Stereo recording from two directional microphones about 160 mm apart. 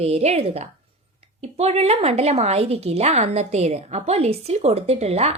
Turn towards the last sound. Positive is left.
turn(degrees=-40)  # may be behind; listen again after turning